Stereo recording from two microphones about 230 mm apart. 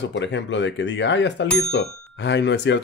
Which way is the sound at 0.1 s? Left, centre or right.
Left.